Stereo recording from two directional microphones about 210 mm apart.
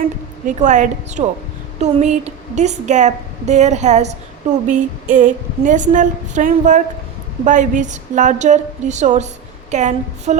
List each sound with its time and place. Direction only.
0.0 s a woman's voice: 35° right (ahead or behind)